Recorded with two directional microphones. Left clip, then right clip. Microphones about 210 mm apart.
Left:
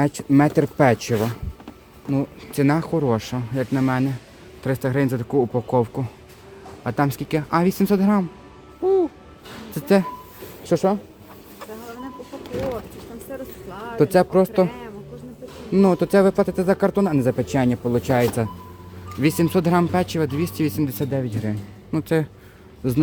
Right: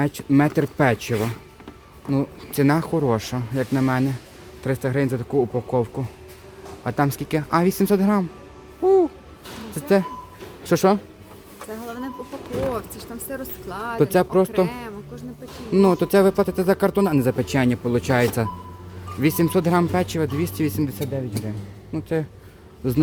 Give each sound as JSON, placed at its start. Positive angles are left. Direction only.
{"t": 0.0, "sound": "speech", "side_deg": 5}
{"t": 8.8, "sound": "music", "side_deg": -10}
{"t": 9.7, "sound": "speech", "side_deg": 10}
{"t": 10.8, "sound": "speech", "side_deg": -25}
{"t": 13.3, "sound": "speech", "side_deg": -50}
{"t": 14.0, "sound": "speech", "side_deg": 5}
{"t": 14.7, "sound": "a man's voice", "side_deg": -55}
{"t": 15.7, "sound": "speech", "side_deg": 0}
{"t": 21.0, "sound": "speech", "side_deg": 30}
{"t": 22.8, "sound": "speech", "side_deg": 5}